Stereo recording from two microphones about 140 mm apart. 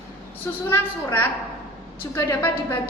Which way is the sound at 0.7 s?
15° left (ahead or behind).